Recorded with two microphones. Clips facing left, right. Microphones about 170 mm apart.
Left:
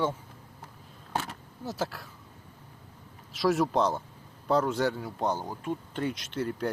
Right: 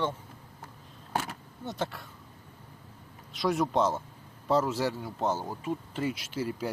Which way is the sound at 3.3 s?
Centre (ahead or behind).